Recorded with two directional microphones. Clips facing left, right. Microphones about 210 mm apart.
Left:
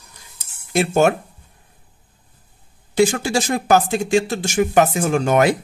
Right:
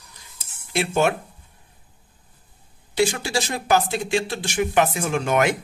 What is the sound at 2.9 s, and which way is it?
Speech, 50° left (ahead or behind).